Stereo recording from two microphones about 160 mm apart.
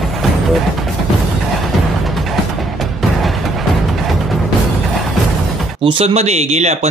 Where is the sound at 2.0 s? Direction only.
Centre (ahead or behind).